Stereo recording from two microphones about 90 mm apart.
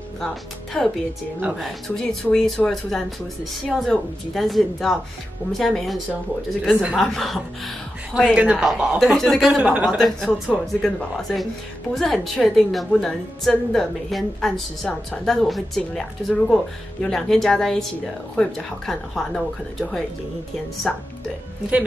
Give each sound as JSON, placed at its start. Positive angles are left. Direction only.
{"t": 0.8, "sound": "a woman's voice", "side_deg": 5}
{"t": 7.0, "sound": "a woman's voice", "side_deg": 5}
{"t": 9.6, "sound": "a woman's voice", "side_deg": -15}
{"t": 9.8, "sound": "a woman's voice", "side_deg": 0}